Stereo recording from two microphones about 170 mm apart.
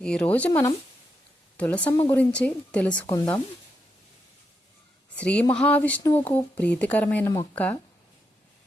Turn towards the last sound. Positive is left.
turn(degrees=10)  # may be behind; listen again after turning